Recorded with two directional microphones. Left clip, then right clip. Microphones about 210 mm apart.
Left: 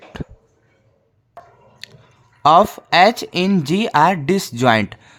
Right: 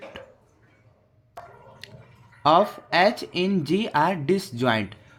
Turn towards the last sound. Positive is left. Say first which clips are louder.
# left 9 dB
turn(degrees=35)  # may be behind; listen again after turning